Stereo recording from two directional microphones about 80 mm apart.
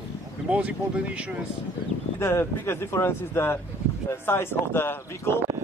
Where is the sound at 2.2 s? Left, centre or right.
Left.